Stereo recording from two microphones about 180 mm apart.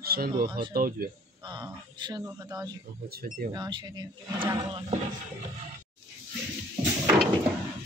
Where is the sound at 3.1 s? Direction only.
55° right (ahead or behind).